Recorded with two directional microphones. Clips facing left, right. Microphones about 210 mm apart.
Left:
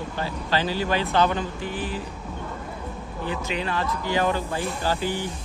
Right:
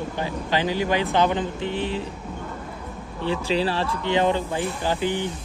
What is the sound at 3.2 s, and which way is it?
Speech, 30° right (ahead or behind).